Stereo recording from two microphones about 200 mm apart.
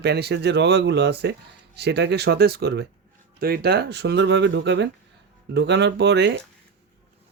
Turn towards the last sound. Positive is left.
turn(degrees=-60)  # may be behind; listen again after turning